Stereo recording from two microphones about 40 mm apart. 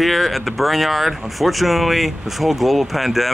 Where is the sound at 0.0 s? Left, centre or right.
Centre.